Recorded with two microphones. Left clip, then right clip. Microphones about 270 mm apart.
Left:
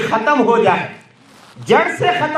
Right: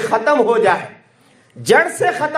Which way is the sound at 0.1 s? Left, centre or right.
Right.